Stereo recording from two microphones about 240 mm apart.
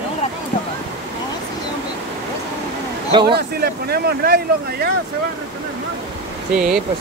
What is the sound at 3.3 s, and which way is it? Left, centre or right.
Speech, right.